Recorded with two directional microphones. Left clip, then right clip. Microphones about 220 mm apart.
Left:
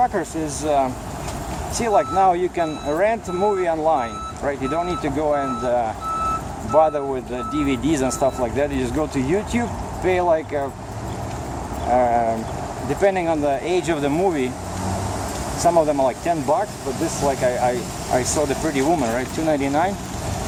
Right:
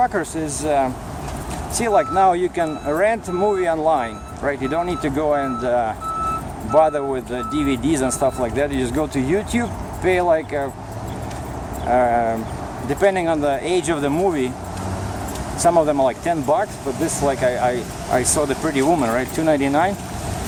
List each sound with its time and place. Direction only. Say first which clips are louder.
0.0 s speech: right 1 dB; centre (ahead or behind)
11.9 s speech: right 1 dB; 5° right (ahead or behind)
15.6 s speech: right 1 dB; 5° right (ahead or behind)